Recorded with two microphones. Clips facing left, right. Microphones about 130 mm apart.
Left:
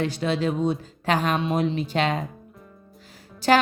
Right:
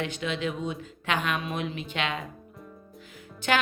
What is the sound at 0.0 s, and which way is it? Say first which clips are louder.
A woman's voice: left 6 dB; 35° left (ahead or behind).